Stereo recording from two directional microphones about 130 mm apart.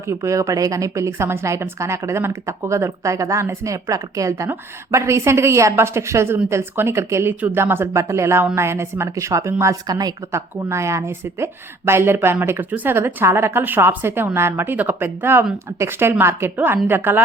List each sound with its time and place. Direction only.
0.1 s a woman's voice: 25° right (ahead or behind)